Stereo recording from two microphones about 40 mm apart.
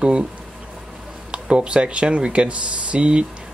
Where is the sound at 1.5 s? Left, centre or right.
Right.